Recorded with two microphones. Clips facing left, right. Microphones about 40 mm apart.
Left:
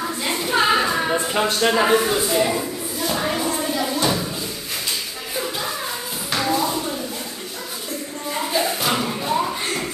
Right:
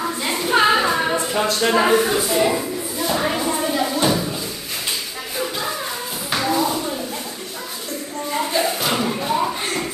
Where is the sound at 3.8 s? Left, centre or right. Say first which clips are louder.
Right 2 dB; centre.